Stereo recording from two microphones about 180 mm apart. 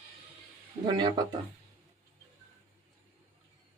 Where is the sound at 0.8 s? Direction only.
25° right (ahead or behind).